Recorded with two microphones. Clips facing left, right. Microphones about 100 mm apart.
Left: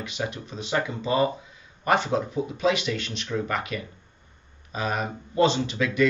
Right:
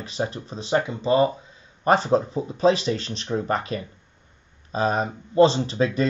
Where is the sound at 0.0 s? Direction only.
35° right (ahead or behind).